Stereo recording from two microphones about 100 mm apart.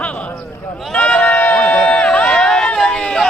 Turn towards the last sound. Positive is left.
turn(degrees=5)  # may be behind; listen again after turning